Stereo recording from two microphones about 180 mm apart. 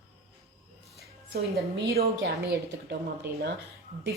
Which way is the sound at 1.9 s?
65° right (ahead or behind).